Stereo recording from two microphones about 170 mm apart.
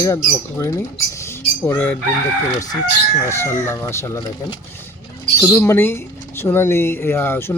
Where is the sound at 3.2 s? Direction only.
15° left (ahead or behind).